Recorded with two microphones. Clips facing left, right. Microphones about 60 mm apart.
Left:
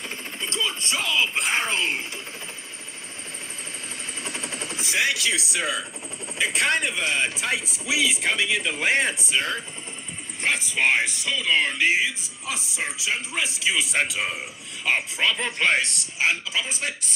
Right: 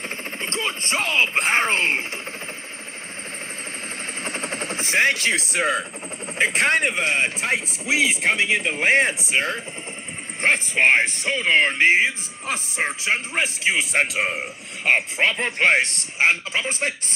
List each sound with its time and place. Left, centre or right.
0.4 s speech: right
4.2 s vehicle: right
6.4 s speech: right